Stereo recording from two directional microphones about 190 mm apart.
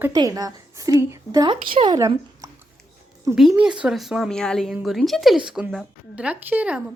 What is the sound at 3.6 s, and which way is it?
A woman's voice, 5° right (ahead or behind).